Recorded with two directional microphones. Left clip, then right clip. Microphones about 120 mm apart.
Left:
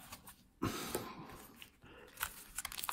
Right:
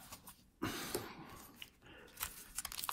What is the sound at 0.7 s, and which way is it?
Cough, 70° left (ahead or behind).